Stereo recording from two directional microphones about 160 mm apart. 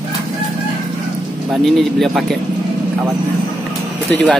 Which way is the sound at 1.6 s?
Centre (ahead or behind).